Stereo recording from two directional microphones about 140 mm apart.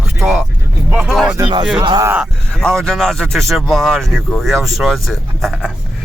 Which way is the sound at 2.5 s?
5° left (ahead or behind).